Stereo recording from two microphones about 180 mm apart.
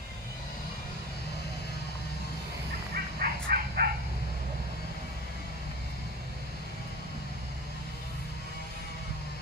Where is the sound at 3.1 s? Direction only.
55° right (ahead or behind).